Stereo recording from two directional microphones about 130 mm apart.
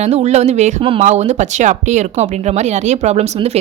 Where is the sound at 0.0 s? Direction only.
60° right (ahead or behind).